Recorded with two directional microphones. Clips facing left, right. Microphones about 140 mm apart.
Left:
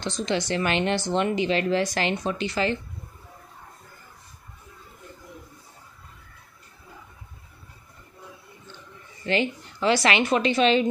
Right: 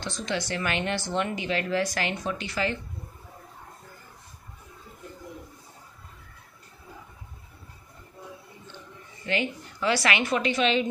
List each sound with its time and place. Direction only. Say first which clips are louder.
0.0 s a woman's voice: left 4 dB; 20° left (ahead or behind)
9.3 s a woman's voice: left 4 dB; 30° left (ahead or behind)